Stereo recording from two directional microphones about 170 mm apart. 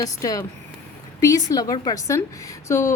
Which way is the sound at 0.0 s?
20° left (ahead or behind).